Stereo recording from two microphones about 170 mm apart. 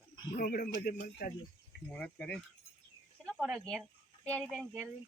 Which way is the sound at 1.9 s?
10° left (ahead or behind).